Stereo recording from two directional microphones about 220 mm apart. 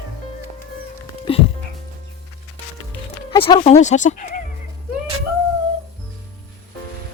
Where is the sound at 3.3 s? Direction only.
25° left (ahead or behind).